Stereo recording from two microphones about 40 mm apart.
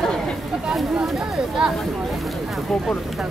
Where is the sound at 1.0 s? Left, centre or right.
Centre.